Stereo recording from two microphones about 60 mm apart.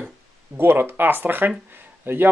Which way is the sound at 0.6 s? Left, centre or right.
Right.